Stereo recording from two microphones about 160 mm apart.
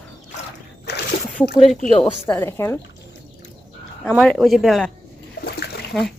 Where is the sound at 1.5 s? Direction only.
Centre (ahead or behind).